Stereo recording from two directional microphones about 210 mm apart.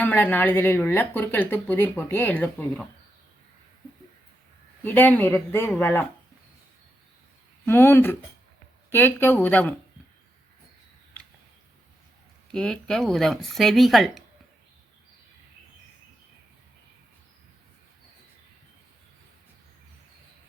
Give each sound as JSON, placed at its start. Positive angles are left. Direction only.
{"t": 0.0, "sound": "speech", "side_deg": 10}
{"t": 4.8, "sound": "speech", "side_deg": 10}
{"t": 7.6, "sound": "speech", "side_deg": 10}
{"t": 12.5, "sound": "speech", "side_deg": 5}